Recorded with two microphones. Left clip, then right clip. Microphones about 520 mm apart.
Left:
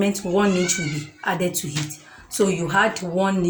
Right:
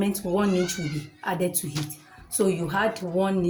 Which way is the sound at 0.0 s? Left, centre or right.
Right.